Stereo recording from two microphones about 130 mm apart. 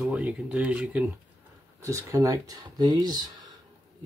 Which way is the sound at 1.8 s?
25° right (ahead or behind).